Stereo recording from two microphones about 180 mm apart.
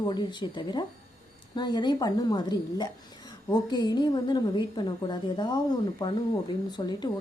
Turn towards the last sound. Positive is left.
turn(degrees=25)  # may be behind; listen again after turning